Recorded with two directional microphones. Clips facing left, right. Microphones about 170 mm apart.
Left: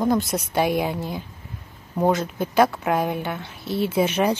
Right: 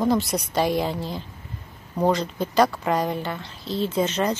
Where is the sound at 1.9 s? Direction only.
5° left (ahead or behind).